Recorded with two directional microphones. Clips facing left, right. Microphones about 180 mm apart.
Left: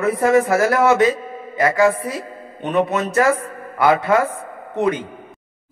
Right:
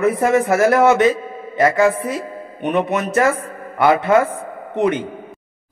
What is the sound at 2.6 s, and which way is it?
A man's voice, 15° right (ahead or behind).